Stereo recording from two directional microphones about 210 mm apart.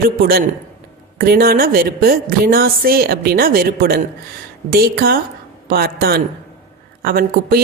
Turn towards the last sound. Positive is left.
turn(degrees=-45)  # may be behind; listen again after turning